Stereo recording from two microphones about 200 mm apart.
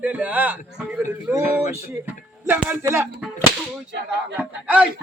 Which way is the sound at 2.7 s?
10° right (ahead or behind).